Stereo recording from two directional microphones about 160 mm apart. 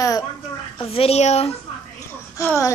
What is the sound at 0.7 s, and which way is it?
Speech, 40° left (ahead or behind).